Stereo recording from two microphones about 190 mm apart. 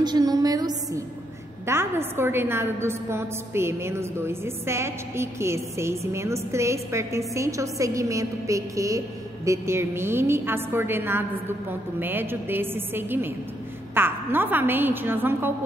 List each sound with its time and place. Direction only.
0.0 s a woman's voice: 20° right (ahead or behind)